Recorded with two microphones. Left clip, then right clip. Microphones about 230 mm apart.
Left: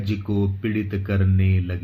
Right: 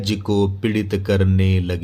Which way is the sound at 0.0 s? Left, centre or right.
Right.